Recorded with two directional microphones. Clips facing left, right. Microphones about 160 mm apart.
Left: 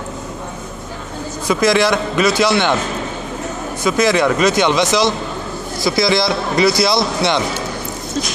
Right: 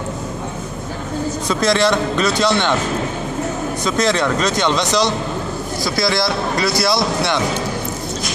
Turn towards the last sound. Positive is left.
turn(degrees=15)  # may be behind; listen again after turning